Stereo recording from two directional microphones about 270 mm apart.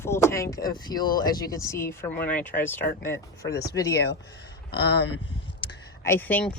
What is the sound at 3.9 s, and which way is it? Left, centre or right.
Speech, left.